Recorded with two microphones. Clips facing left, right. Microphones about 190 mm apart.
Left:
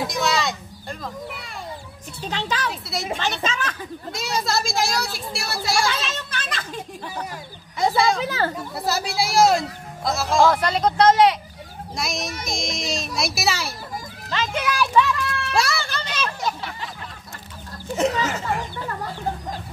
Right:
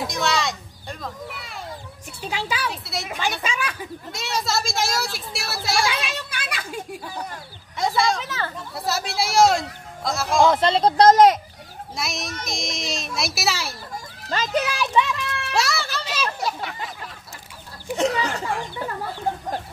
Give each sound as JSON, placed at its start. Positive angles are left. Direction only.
{"t": 0.0, "sound": "children playing", "side_deg": 0}
{"t": 2.2, "sound": "speech", "side_deg": -10}
{"t": 3.2, "sound": "speech", "side_deg": -10}
{"t": 4.1, "sound": "a child's voice", "side_deg": 0}
{"t": 5.9, "sound": "speech", "side_deg": -15}
{"t": 7.7, "sound": "a child's voice", "side_deg": 0}
{"t": 8.3, "sound": "speech", "side_deg": 40}
{"t": 8.7, "sound": "a child's voice", "side_deg": 0}
{"t": 10.4, "sound": "speech", "side_deg": -25}
{"t": 11.9, "sound": "a child's voice", "side_deg": 0}
{"t": 14.3, "sound": "speech", "side_deg": -40}
{"t": 14.7, "sound": "a child's voice", "side_deg": -20}
{"t": 15.5, "sound": "a sound", "side_deg": 0}
{"t": 18.2, "sound": "a child's voice", "side_deg": 5}